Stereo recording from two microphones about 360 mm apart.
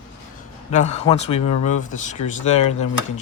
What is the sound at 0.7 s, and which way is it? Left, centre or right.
Speech, centre.